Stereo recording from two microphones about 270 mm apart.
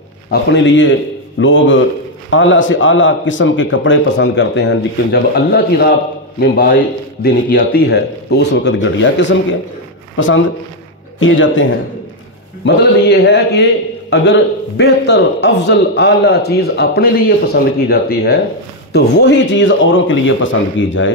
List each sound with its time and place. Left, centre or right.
0.3 s a man's voice: left